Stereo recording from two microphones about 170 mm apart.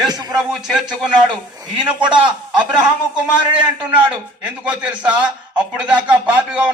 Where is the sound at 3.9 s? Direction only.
30° right (ahead or behind).